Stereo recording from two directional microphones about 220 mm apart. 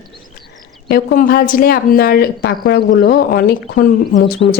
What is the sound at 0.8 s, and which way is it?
A woman's voice, 45° left (ahead or behind).